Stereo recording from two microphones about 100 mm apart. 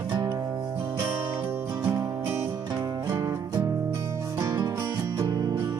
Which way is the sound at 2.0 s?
25° right (ahead or behind).